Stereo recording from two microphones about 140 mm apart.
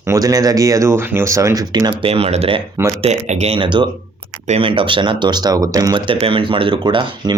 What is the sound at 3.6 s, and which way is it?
Speech, 35° right (ahead or behind).